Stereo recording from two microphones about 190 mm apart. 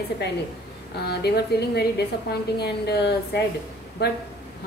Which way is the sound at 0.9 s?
60° left (ahead or behind).